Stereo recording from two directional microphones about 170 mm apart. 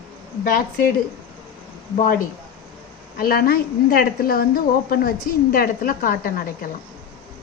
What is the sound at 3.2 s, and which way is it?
A woman's voice, 60° left (ahead or behind).